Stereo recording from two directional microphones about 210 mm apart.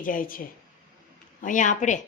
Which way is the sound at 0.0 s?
40° left (ahead or behind).